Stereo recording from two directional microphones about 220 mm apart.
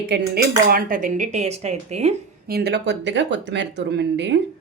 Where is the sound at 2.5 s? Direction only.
45° right (ahead or behind).